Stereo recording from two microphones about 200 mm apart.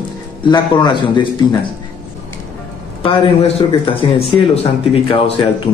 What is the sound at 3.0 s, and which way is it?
A man's voice, 30° left (ahead or behind).